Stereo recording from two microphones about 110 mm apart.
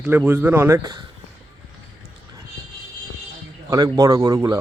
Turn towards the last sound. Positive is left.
turn(degrees=-35)  # may be behind; listen again after turning